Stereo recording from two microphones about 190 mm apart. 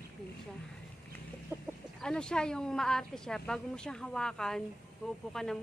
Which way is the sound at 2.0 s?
5° left (ahead or behind).